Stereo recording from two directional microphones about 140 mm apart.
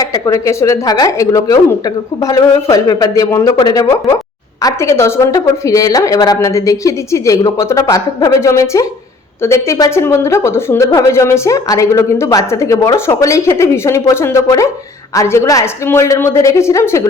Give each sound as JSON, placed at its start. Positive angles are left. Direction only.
{"t": 0.0, "sound": "a woman's voice", "side_deg": 25}